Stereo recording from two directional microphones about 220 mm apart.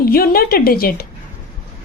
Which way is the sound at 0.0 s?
45° left (ahead or behind).